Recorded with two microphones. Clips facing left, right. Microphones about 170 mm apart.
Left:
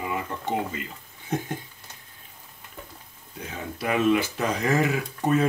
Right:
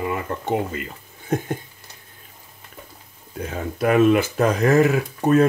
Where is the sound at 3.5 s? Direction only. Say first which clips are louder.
Right 8 dB; 50° right (ahead or behind).